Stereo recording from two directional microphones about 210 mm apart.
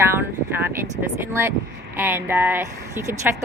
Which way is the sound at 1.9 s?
10° right (ahead or behind).